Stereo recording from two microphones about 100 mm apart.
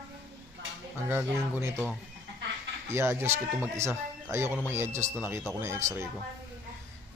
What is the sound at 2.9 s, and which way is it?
Speech, 25° right (ahead or behind).